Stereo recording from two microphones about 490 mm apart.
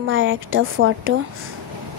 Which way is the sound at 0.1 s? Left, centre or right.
Right.